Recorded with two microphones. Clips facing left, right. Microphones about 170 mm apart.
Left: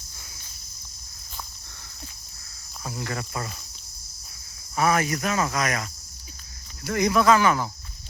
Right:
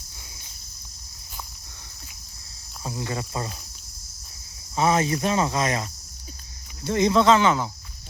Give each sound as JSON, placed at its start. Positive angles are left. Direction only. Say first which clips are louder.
{"t": 2.8, "sound": "cricket", "louder": "right 2 dB", "side_deg": -20}
{"t": 4.8, "sound": "cricket", "louder": "right 2 dB", "side_deg": -25}